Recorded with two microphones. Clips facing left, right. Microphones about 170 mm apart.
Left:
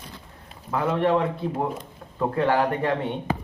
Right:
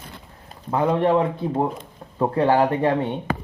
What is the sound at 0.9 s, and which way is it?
Speech, 25° right (ahead or behind).